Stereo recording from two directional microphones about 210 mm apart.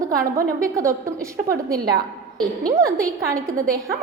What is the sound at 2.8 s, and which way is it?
Speech, 15° right (ahead or behind).